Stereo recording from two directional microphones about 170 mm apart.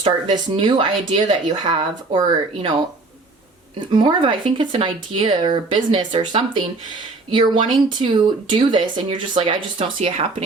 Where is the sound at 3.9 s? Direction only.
30° right (ahead or behind).